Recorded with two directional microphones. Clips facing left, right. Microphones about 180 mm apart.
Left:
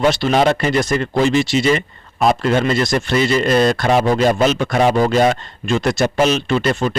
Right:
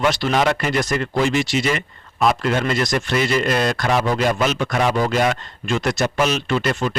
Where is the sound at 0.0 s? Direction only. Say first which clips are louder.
Left 4 dB; 25° left (ahead or behind).